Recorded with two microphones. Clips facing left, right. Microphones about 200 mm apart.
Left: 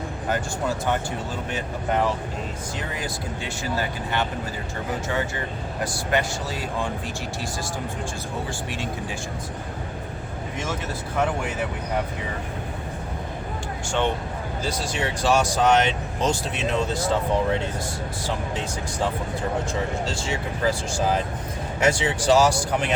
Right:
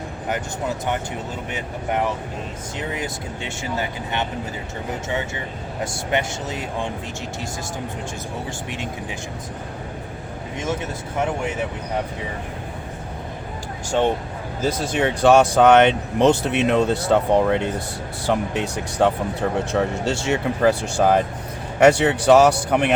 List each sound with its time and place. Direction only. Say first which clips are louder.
0.3 s speech: even; 20° right (ahead or behind)
14.6 s speech: right 7 dB; 55° right (ahead or behind)